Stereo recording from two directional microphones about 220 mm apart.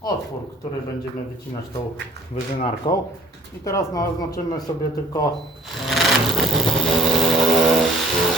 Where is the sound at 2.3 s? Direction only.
25° left (ahead or behind).